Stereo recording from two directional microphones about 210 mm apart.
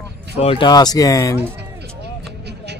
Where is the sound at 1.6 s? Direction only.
55° right (ahead or behind).